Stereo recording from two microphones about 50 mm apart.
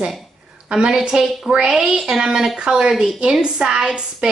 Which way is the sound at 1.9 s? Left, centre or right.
Centre.